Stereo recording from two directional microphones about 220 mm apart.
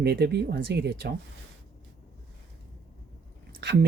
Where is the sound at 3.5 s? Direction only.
50° right (ahead or behind).